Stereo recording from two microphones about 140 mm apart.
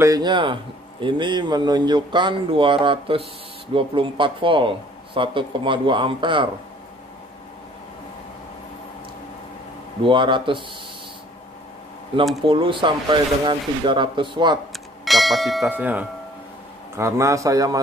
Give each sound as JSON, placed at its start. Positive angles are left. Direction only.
{"t": 0.0, "sound": "speech", "side_deg": -30}
{"t": 10.0, "sound": "speech", "side_deg": -35}
{"t": 12.4, "sound": "speech", "side_deg": -35}
{"t": 14.7, "sound": "bell", "side_deg": 0}
{"t": 15.7, "sound": "a man's voice", "side_deg": -10}